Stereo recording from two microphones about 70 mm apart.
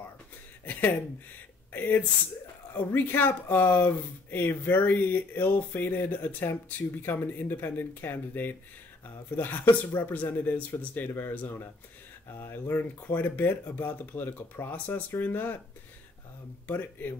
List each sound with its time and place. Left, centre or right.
0.7 s speech: left
16.6 s speech: left